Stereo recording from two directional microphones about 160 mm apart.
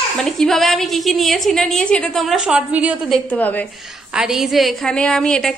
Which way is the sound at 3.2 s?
10° left (ahead or behind).